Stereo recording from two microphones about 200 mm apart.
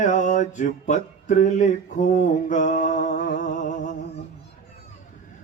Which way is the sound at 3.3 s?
40° left (ahead or behind).